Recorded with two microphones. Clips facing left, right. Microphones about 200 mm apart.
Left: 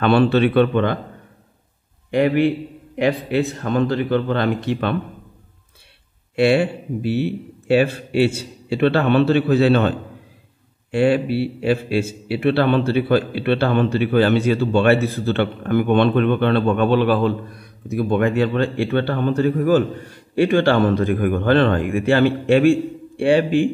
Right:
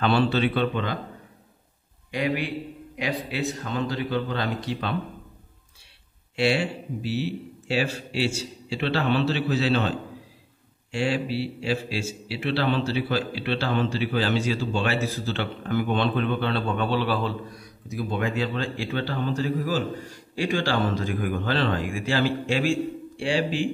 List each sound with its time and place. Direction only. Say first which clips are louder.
0.0 s a man's voice: left 7 dB; 60° left (ahead or behind)
2.0 s a man's voice: left 10 dB; 55° left (ahead or behind)
6.3 s a man's voice: left 8 dB; 55° left (ahead or behind)